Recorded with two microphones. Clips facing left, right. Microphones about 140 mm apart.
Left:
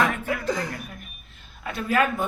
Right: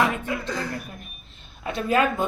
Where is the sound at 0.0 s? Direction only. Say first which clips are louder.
Even; 20° right (ahead or behind).